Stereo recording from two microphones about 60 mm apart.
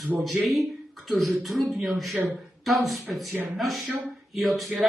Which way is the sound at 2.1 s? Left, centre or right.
Right.